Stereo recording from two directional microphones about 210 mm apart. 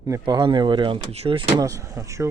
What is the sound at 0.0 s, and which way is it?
Speech, 20° right (ahead or behind).